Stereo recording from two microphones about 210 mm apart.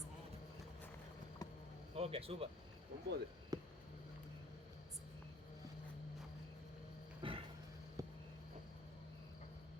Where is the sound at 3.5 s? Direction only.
20° right (ahead or behind).